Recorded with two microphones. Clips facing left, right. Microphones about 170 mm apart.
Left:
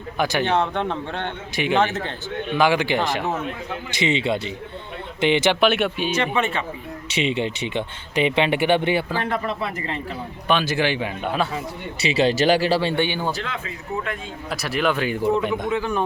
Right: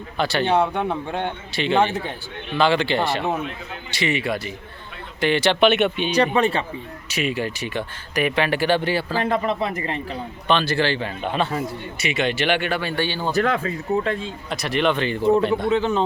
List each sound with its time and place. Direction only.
0.2 s speech: 15° left (ahead or behind)
0.4 s speech: 10° right (ahead or behind)
2.6 s speech: 10° left (ahead or behind)
5.5 s speech: 5° left (ahead or behind)
6.1 s speech: 35° right (ahead or behind)
7.1 s speech: 25° left (ahead or behind)
9.1 s speech: 20° right (ahead or behind)
10.5 s speech: 10° left (ahead or behind)
12.1 s speech: 35° left (ahead or behind); by 13.3 s 15° left (ahead or behind)
13.3 s speech: 50° right (ahead or behind); by 14.2 s 30° right (ahead or behind)
14.5 s speech: centre (ahead or behind)
15.7 s speech: 20° right (ahead or behind)